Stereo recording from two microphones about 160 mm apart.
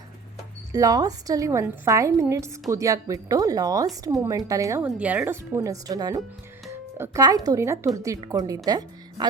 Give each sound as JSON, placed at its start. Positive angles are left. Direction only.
{"t": 0.7, "sound": "a woman's voice", "side_deg": -20}
{"t": 4.8, "sound": "speech", "side_deg": -10}
{"t": 6.7, "sound": "music", "side_deg": -15}
{"t": 7.4, "sound": "a woman's voice", "side_deg": -20}